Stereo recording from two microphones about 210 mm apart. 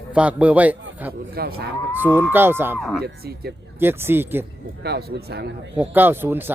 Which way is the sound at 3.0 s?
50° right (ahead or behind).